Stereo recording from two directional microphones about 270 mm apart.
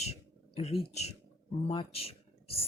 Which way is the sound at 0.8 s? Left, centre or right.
Left.